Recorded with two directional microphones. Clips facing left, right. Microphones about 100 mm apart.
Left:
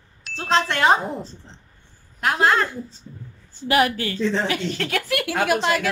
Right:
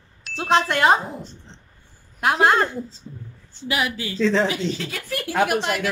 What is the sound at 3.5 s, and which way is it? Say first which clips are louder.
Speech: left 6 dB; 50° left (ahead or behind).